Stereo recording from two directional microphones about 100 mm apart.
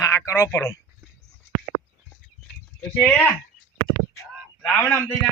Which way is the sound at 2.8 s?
15° left (ahead or behind).